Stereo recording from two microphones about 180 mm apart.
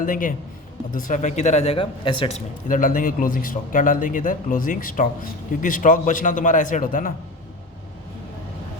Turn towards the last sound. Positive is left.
turn(degrees=50)  # may be behind; listen again after turning